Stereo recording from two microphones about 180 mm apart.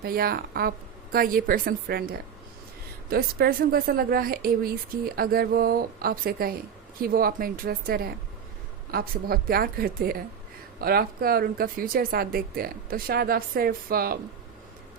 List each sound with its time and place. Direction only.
0.0 s a woman's voice: 55° right (ahead or behind)